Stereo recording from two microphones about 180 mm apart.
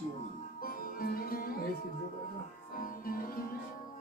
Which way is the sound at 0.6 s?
55° left (ahead or behind).